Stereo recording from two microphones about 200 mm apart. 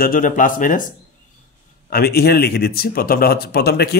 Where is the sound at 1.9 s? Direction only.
50° left (ahead or behind).